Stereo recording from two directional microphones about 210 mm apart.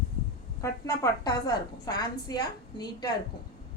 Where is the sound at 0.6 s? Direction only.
15° left (ahead or behind).